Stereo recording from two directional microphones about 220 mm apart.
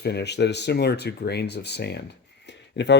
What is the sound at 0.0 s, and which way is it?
Speech, 50° left (ahead or behind).